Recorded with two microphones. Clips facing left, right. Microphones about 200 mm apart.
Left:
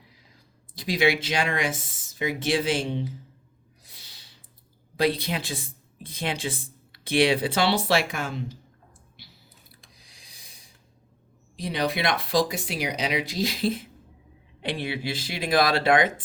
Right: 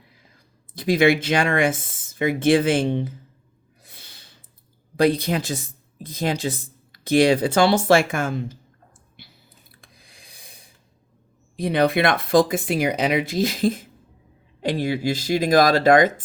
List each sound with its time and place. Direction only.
0.3 s a woman's voice: 50° right (ahead or behind)
3.8 s snort: 55° right (ahead or behind)
4.9 s a woman's voice: 45° right (ahead or behind)
9.7 s a sound: 55° right (ahead or behind)
11.5 s a woman's voice: 55° right (ahead or behind)